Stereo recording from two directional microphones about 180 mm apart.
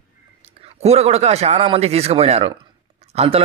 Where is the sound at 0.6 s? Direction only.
35° right (ahead or behind).